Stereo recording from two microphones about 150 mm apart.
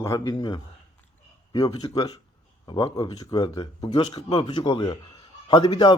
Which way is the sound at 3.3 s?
25° left (ahead or behind).